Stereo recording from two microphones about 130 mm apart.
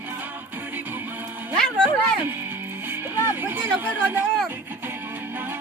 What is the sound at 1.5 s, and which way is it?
Music, 5° left (ahead or behind).